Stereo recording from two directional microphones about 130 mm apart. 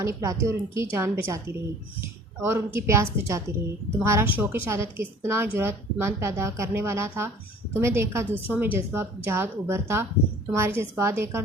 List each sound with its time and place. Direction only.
0.0 s a woman's voice: 25° right (ahead or behind)